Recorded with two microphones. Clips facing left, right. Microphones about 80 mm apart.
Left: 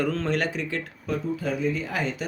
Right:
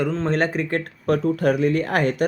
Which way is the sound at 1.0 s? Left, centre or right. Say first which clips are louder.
Right 9 dB; right.